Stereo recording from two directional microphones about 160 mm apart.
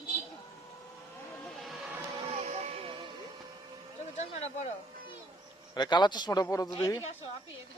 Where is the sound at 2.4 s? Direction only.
40° right (ahead or behind).